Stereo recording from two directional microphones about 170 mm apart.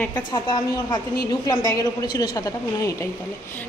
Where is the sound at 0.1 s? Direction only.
25° left (ahead or behind).